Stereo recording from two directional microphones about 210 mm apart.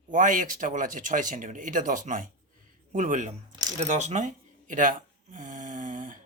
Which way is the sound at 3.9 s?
35° right (ahead or behind).